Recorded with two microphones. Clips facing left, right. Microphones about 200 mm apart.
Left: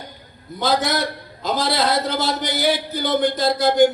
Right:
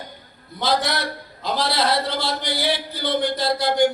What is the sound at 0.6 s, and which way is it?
Speech, 45° left (ahead or behind).